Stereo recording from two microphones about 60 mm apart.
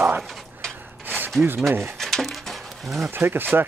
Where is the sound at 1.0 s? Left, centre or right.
Right.